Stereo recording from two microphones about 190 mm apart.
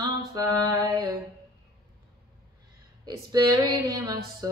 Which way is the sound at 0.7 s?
20° right (ahead or behind).